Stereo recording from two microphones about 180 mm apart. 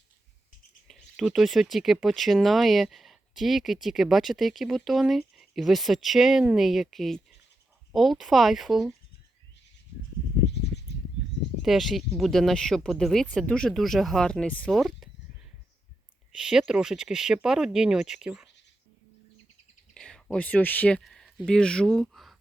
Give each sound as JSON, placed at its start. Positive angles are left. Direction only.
{"t": 0.9, "sound": "speech", "side_deg": 0}
{"t": 10.4, "sound": "a sound", "side_deg": 70}
{"t": 11.6, "sound": "speech", "side_deg": 0}
{"t": 19.9, "sound": "speech", "side_deg": 5}